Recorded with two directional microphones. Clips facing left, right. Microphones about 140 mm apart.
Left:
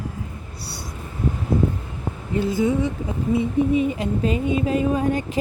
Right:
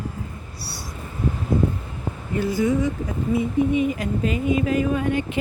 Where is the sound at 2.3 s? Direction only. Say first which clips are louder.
Left 1 dB; 20° left (ahead or behind).